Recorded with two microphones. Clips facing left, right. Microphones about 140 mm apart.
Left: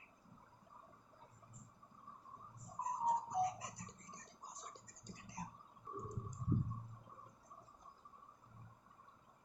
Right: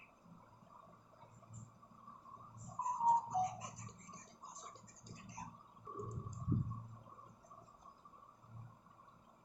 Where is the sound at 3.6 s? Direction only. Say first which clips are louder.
Even; 70° left (ahead or behind).